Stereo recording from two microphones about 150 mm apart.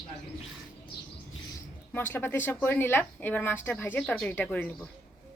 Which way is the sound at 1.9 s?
15° left (ahead or behind).